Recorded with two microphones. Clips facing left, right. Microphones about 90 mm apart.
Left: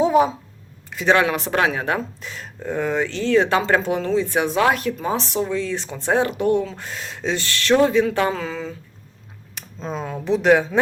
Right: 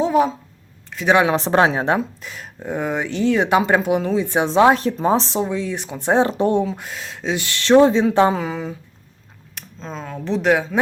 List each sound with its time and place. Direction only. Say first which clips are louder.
0.0 s a sound: left 1 dB; 5° left (ahead or behind)
1.0 s speech: right 2 dB; 20° right (ahead or behind)
1.4 s speech: right 4 dB; 30° right (ahead or behind)
2.0 s speech: right 3 dB; 5° right (ahead or behind); by 6.7 s 30° right (ahead or behind)
6.7 s speech: right 3 dB; 5° right (ahead or behind)
7.3 s speech: right 5 dB; 20° right (ahead or behind)
9.6 s speech: left 3 dB; 5° left (ahead or behind)